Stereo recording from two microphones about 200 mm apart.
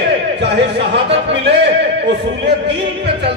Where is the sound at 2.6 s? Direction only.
60° right (ahead or behind).